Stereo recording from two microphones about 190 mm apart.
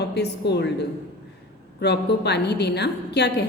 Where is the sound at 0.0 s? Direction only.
60° left (ahead or behind).